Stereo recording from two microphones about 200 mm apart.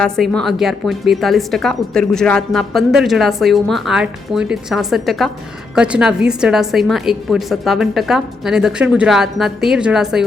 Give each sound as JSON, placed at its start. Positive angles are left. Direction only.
{"t": 0.0, "sound": "a woman's voice", "side_deg": 0}